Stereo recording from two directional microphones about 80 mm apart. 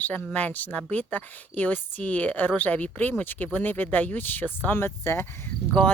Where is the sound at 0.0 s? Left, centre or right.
Left.